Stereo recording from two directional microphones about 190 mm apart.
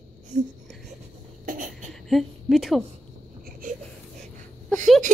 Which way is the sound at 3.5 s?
45° right (ahead or behind).